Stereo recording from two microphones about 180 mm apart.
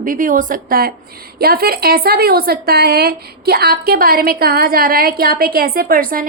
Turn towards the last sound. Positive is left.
turn(degrees=-50)  # may be behind; listen again after turning